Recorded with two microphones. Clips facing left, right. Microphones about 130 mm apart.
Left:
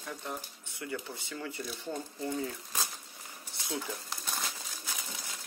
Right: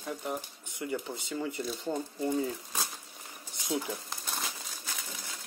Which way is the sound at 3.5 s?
15° right (ahead or behind).